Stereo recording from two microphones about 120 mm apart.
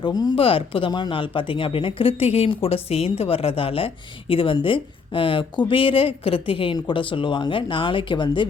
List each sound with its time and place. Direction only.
0.0 s speech: 35° left (ahead or behind)
0.3 s speech: 50° left (ahead or behind)